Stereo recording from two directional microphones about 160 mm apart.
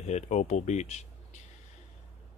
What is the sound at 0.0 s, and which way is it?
Speech, 45° left (ahead or behind).